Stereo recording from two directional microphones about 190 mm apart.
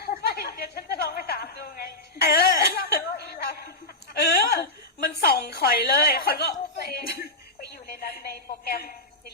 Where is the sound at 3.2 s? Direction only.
55° left (ahead or behind).